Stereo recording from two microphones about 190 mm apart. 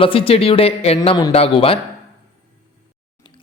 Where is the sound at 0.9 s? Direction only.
20° left (ahead or behind).